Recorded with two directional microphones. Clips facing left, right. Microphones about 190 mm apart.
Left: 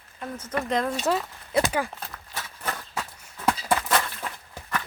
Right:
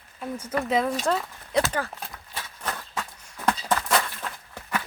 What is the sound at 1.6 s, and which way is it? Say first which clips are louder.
Speech: left 2 dB; 15° left (ahead or behind).